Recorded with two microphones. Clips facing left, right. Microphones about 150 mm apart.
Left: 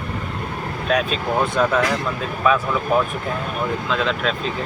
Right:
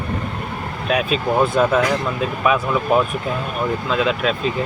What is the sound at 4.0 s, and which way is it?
Speech, 10° right (ahead or behind).